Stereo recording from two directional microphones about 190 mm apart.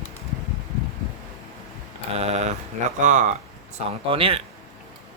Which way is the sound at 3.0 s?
40° right (ahead or behind).